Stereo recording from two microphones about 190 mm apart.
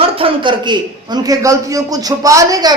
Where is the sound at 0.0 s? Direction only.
25° right (ahead or behind).